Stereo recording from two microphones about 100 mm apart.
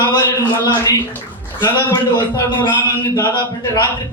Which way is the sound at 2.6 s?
50° left (ahead or behind).